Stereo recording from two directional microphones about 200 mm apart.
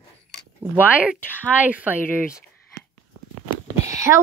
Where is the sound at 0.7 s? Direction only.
5° right (ahead or behind).